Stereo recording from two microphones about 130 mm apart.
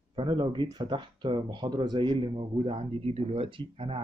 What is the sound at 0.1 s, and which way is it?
Speech, 40° right (ahead or behind).